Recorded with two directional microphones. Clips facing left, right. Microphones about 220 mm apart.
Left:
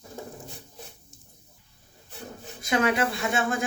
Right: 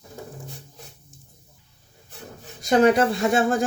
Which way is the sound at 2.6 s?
35° right (ahead or behind).